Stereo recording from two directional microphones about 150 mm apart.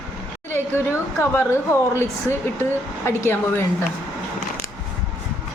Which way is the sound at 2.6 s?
15° left (ahead or behind).